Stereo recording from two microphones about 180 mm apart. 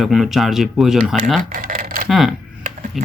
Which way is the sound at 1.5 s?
50° right (ahead or behind).